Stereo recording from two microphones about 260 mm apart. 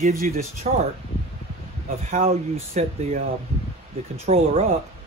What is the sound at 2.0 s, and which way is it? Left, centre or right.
Speech, right.